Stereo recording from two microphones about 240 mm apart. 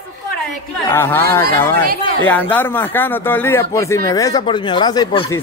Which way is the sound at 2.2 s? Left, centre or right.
Centre.